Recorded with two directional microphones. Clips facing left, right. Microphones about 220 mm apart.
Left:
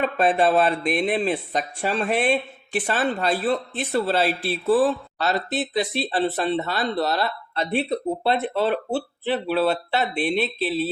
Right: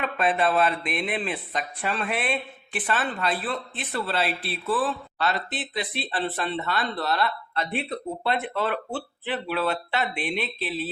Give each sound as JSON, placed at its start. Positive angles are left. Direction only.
{"t": 0.0, "sound": "speech", "side_deg": 45}